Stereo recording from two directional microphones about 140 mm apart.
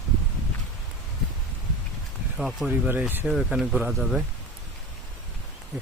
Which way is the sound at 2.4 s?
Centre (ahead or behind).